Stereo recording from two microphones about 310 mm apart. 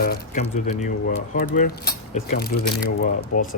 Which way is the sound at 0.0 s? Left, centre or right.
Left.